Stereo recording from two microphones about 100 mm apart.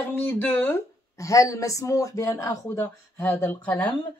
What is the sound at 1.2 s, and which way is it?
Speech, 35° left (ahead or behind).